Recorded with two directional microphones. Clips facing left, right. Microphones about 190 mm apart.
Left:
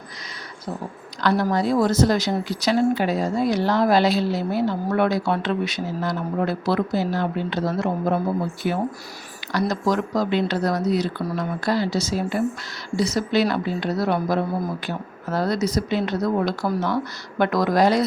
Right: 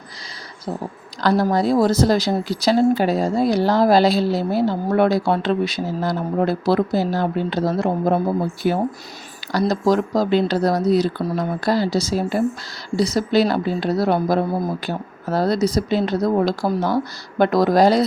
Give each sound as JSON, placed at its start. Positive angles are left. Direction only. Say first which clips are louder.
{"t": 1.2, "sound": "a woman's voice", "louder": "right 3 dB", "side_deg": -35}